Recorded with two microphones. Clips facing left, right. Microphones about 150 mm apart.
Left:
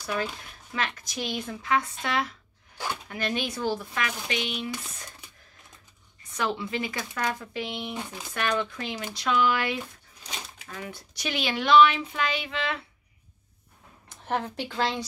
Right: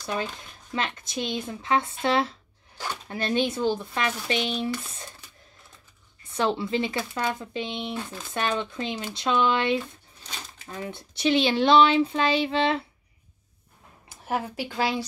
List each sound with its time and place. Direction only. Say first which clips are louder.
0.0 s a child's voice: even; 25° right (ahead or behind)
6.2 s a child's voice: right 4 dB; 30° right (ahead or behind)
7.9 s speech: right 2 dB; 15° left (ahead or behind)
8.3 s a child's voice: even; 25° right (ahead or behind)
10.8 s a child's voice: right 8 dB; 25° right (ahead or behind)
14.0 s speech: right 1 dB; 10° right (ahead or behind)